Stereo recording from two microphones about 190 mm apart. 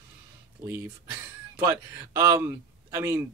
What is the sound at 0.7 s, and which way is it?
A man's voice, 10° right (ahead or behind).